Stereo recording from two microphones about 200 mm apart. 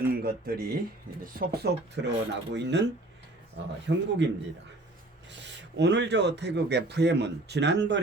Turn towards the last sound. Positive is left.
turn(degrees=-60)  # may be behind; listen again after turning